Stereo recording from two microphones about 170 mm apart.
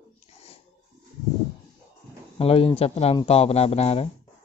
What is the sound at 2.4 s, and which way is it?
Speech, 35° left (ahead or behind).